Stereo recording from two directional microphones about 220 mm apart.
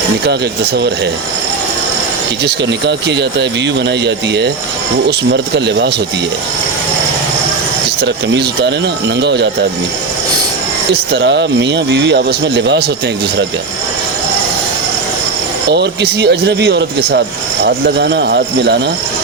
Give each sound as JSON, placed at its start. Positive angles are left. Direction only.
{"t": 0.3, "sound": "speech", "side_deg": -50}
{"t": 2.4, "sound": "speech", "side_deg": -50}
{"t": 8.0, "sound": "speech", "side_deg": -50}
{"t": 10.9, "sound": "speech", "side_deg": -50}
{"t": 15.7, "sound": "speech", "side_deg": -50}